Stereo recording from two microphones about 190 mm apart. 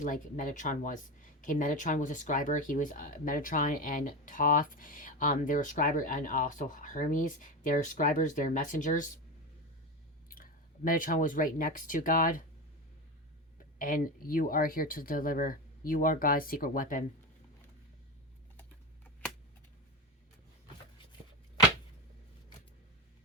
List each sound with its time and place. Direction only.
0.0 s speech: 45° left (ahead or behind)
10.2 s speech: 45° left (ahead or behind)
13.7 s speech: 45° left (ahead or behind)